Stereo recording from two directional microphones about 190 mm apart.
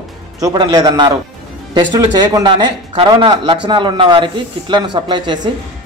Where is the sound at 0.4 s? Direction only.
20° right (ahead or behind).